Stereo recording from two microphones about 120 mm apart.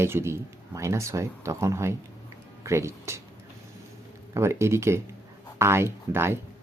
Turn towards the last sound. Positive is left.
turn(degrees=-20)  # may be behind; listen again after turning